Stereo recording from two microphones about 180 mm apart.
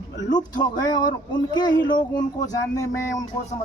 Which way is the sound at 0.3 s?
25° left (ahead or behind).